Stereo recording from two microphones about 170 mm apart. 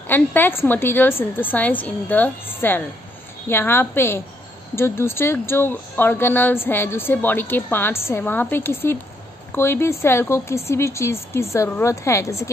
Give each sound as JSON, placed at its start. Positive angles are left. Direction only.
{"t": 0.1, "sound": "speech", "side_deg": 10}